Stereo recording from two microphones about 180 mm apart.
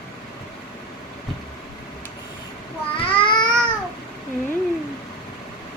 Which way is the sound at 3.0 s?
30° left (ahead or behind).